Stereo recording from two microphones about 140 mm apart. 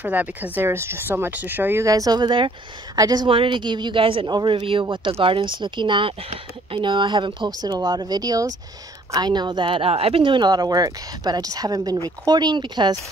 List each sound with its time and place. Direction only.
0.0 s speech: 10° right (ahead or behind); by 12.9 s 30° right (ahead or behind)